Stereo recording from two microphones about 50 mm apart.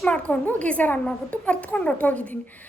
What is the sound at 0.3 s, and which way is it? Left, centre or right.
A woman's voice, left.